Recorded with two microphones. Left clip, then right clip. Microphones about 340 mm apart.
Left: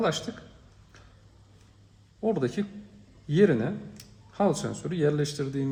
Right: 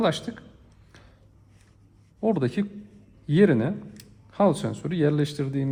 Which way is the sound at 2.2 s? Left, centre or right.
Right.